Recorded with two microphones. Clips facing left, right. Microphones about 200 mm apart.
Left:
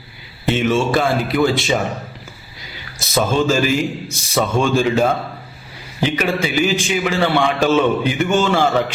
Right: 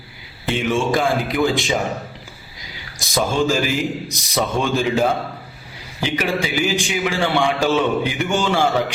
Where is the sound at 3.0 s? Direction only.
15° right (ahead or behind).